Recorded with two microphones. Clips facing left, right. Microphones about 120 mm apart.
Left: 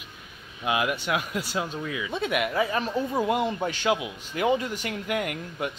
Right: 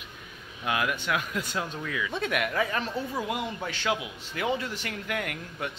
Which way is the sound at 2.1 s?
5° left (ahead or behind).